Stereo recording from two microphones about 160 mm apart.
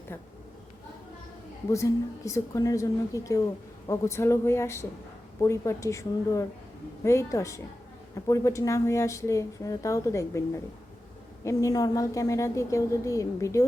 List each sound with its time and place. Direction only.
1.7 s a woman's voice: 20° left (ahead or behind)